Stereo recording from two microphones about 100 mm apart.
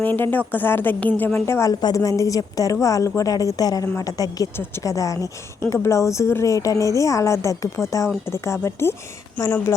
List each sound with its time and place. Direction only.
0.0 s a woman's voice: 20° left (ahead or behind)
1.7 s a woman's voice: 45° left (ahead or behind)
2.0 s a woman's voice: 35° left (ahead or behind)